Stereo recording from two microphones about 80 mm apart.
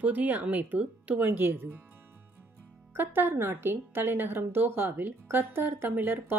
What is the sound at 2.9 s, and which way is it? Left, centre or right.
A woman's voice, right.